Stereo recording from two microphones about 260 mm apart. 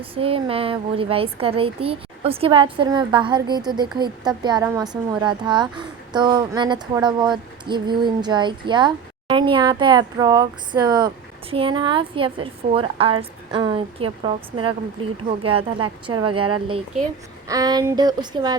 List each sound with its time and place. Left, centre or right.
0.0 s a woman's voice: right